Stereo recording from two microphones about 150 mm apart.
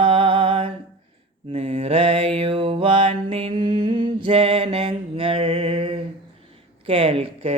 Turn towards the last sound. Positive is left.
turn(degrees=-40)  # may be behind; listen again after turning